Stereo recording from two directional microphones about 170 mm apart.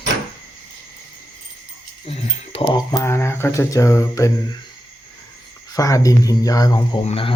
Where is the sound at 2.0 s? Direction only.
35° left (ahead or behind).